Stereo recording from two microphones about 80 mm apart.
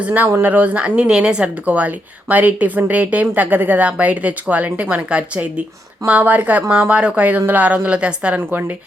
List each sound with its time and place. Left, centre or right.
0.0 s speech: right
8.4 s speech: right